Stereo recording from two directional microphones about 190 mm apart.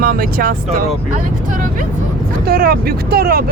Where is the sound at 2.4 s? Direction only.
50° right (ahead or behind).